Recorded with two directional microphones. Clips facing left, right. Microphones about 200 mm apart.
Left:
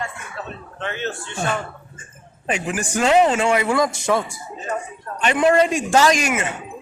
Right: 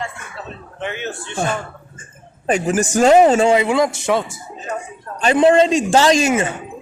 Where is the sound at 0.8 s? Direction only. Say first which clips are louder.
Right 1 dB; 15° right (ahead or behind).